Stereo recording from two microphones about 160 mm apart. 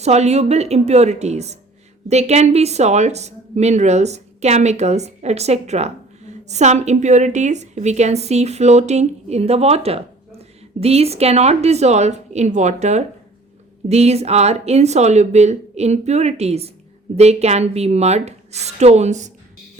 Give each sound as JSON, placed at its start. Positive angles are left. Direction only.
{"t": 0.0, "sound": "a woman's voice", "side_deg": -45}